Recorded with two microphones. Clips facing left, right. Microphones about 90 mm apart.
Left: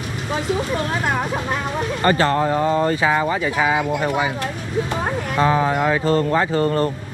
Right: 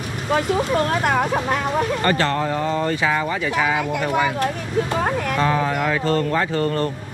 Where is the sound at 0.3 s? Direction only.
55° right (ahead or behind).